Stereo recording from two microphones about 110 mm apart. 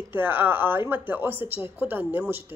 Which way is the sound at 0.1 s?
20° right (ahead or behind).